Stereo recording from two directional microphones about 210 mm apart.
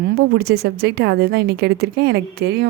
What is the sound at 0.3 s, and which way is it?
Speech, 50° right (ahead or behind).